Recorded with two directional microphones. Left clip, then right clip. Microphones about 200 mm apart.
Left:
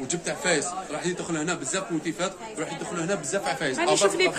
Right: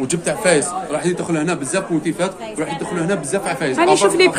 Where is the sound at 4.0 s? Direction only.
20° right (ahead or behind).